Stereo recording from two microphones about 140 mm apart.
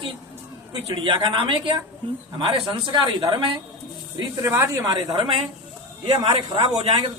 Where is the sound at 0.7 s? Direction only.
35° right (ahead or behind).